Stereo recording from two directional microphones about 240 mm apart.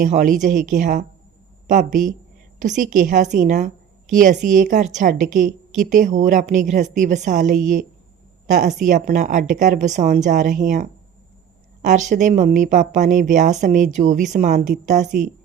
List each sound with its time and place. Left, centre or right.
0.0 s speech: right
11.9 s speech: right